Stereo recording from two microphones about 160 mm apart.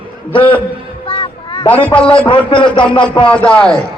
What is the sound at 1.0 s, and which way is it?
Music, 35° left (ahead or behind).